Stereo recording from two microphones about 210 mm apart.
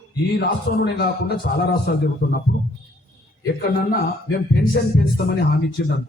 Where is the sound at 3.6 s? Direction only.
45° left (ahead or behind).